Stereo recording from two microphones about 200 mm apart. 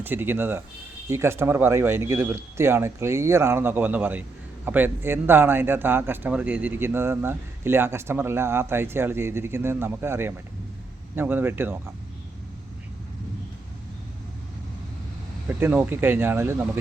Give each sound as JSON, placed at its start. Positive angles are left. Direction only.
{"t": 0.0, "sound": "a man's voice", "side_deg": -10}
{"t": 15.4, "sound": "a man's voice", "side_deg": -10}